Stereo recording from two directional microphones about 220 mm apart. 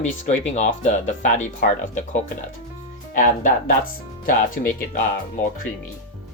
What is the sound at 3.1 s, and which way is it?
Speech, 40° left (ahead or behind).